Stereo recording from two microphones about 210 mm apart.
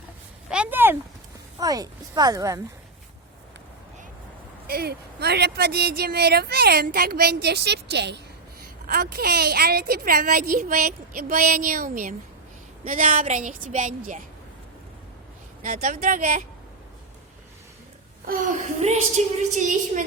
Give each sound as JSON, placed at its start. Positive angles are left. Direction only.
{"t": 0.5, "sound": "a sound", "side_deg": -5}
{"t": 1.5, "sound": "speech", "side_deg": -15}
{"t": 4.6, "sound": "a woman's voice", "side_deg": -45}
{"t": 15.6, "sound": "a woman's voice", "side_deg": -35}
{"t": 18.3, "sound": "a woman's voice", "side_deg": -40}